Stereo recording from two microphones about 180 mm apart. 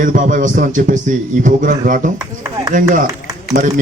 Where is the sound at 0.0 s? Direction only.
45° right (ahead or behind).